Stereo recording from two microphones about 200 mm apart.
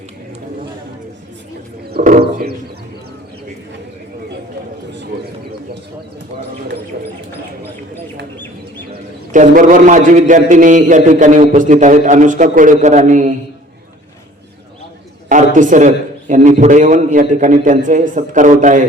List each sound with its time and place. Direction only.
1.9 s a sound: 45° right (ahead or behind)
8.9 s a man's voice: 40° right (ahead or behind)
15.5 s a man's voice: 40° right (ahead or behind)